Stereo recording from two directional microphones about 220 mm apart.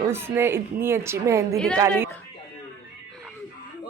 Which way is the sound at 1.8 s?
10° right (ahead or behind).